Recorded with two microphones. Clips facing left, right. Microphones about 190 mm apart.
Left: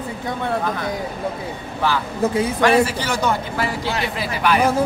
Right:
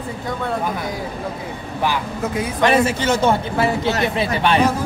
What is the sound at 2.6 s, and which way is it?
A man's voice, 25° right (ahead or behind).